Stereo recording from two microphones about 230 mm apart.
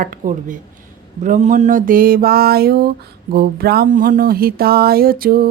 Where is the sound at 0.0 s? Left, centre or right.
Right.